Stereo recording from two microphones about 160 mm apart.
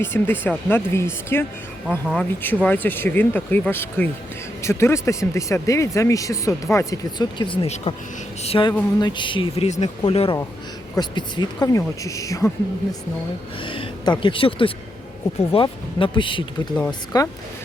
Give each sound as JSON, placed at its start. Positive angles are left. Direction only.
{"t": 0.0, "sound": "speech", "side_deg": 15}
{"t": 10.0, "sound": "speech", "side_deg": 35}
{"t": 10.9, "sound": "speech", "side_deg": 25}
{"t": 13.6, "sound": "a sound", "side_deg": 35}
{"t": 14.2, "sound": "speech", "side_deg": 30}